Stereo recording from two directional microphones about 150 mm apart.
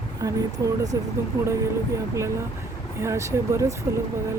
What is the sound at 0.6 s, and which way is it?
Speech, 25° right (ahead or behind).